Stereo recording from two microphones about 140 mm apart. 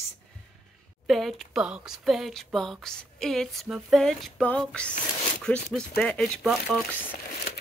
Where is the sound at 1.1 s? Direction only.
Centre (ahead or behind).